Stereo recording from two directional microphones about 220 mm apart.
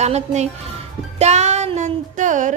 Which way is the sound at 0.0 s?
30° right (ahead or behind).